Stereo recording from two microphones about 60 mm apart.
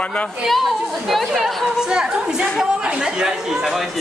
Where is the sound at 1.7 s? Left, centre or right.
Centre.